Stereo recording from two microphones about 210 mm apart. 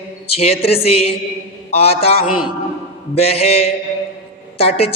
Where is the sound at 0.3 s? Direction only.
30° left (ahead or behind).